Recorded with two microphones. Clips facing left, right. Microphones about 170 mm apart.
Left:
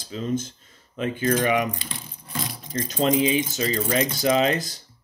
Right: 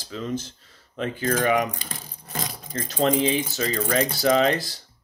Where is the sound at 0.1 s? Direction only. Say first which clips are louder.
Left 3 dB; 25° left (ahead or behind).